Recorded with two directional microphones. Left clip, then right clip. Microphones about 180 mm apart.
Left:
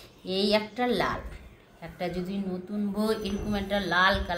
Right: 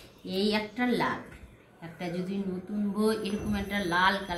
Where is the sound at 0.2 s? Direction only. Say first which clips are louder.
Left 4 dB; 35° left (ahead or behind).